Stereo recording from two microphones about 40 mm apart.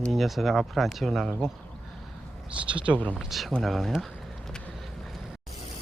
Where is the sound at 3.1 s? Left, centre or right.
Centre.